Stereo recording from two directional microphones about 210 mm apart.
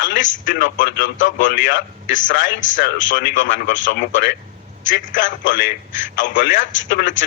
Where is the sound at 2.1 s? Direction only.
40° left (ahead or behind).